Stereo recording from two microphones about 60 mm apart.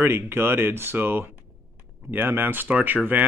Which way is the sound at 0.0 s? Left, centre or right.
Right.